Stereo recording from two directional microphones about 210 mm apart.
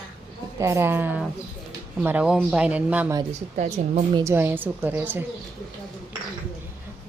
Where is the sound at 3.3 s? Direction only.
35° right (ahead or behind).